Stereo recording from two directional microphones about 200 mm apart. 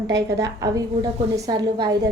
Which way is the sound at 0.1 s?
15° right (ahead or behind).